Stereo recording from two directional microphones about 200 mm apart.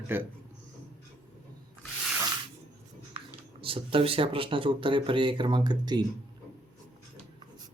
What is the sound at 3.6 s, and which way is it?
Speech, 25° right (ahead or behind).